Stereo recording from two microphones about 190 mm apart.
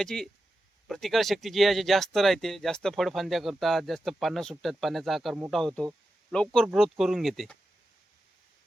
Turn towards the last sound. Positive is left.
turn(degrees=0)  # may be behind; listen again after turning